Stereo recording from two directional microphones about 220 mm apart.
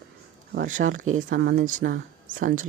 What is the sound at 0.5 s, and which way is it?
Speech, 35° right (ahead or behind).